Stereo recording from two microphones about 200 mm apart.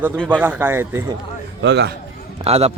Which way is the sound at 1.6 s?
60° right (ahead or behind).